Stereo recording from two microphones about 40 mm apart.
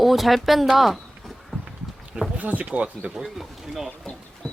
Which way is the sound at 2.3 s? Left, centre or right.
Right.